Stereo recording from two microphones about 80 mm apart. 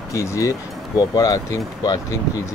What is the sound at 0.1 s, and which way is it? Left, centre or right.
Speech, left.